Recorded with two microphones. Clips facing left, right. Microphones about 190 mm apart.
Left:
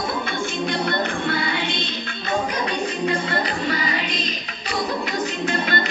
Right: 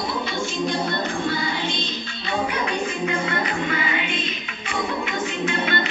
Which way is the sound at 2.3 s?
40° left (ahead or behind).